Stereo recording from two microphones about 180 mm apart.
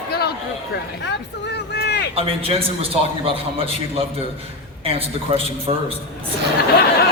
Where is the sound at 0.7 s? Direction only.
70° left (ahead or behind).